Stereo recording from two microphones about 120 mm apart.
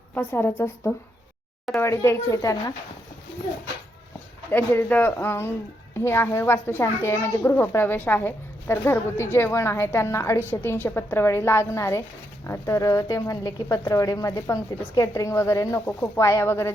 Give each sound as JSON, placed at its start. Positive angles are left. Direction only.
{"t": 0.1, "sound": "a woman's voice", "side_deg": 15}
{"t": 4.7, "sound": "a woman's voice", "side_deg": 15}